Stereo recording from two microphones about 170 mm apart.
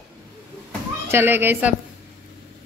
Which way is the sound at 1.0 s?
15° right (ahead or behind).